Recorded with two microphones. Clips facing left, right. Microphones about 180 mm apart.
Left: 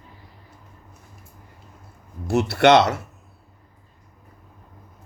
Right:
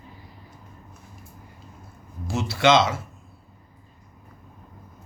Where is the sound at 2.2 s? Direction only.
65° left (ahead or behind).